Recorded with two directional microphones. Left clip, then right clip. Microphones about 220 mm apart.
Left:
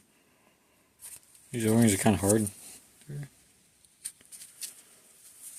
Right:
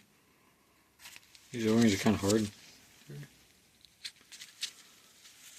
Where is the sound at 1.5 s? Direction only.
40° left (ahead or behind).